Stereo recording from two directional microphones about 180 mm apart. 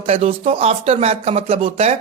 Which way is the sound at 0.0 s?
35° right (ahead or behind).